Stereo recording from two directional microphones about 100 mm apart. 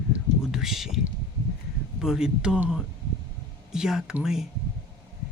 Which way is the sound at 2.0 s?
5° right (ahead or behind).